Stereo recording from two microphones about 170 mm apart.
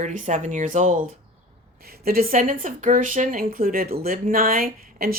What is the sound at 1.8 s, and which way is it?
Speech, 60° right (ahead or behind).